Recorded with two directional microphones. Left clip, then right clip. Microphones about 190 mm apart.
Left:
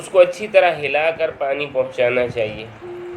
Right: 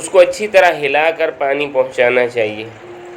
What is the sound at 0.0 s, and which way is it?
A man's voice, 20° right (ahead or behind).